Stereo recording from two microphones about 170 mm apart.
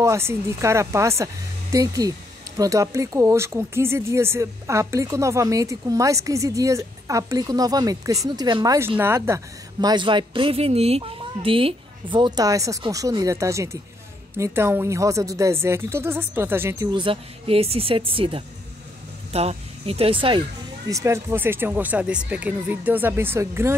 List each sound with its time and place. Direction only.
0.0 s speech: 15° right (ahead or behind)
8.7 s speech: 15° right (ahead or behind)
16.9 s speech: 30° right (ahead or behind)
20.9 s speech: 15° right (ahead or behind)